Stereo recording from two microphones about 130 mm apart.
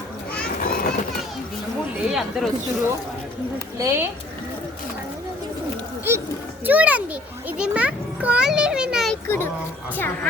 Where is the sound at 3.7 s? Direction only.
20° right (ahead or behind).